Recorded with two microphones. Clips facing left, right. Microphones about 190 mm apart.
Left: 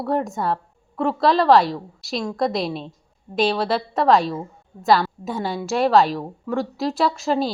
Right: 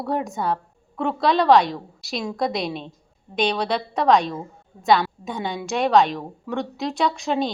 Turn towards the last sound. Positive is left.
turn(degrees=0)  # may be behind; listen again after turning